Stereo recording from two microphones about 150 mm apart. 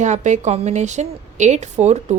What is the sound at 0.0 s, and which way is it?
Speech, 55° right (ahead or behind).